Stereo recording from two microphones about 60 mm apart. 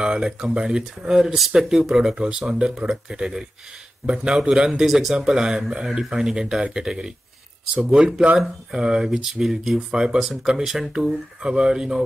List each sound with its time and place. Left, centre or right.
0.0 s speech: centre